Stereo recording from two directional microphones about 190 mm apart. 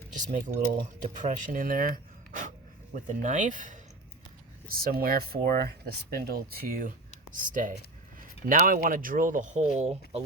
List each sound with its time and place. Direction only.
0.1 s speech: 40° right (ahead or behind)